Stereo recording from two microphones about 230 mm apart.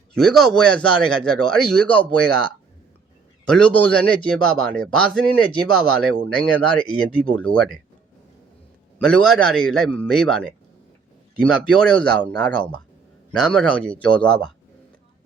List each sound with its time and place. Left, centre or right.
0.1 s a man's voice: centre
3.4 s a man's voice: centre
9.0 s a man's voice: centre